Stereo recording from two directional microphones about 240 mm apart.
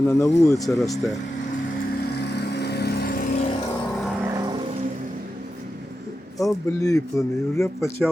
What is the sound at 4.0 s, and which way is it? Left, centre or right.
Music, centre.